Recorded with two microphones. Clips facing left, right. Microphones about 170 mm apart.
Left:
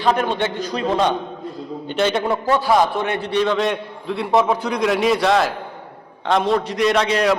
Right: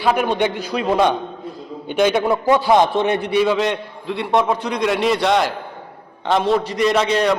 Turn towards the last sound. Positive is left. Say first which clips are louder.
# even
turn(degrees=0)  # may be behind; listen again after turning